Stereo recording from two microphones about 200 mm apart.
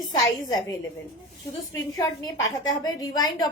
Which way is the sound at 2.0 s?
20° left (ahead or behind).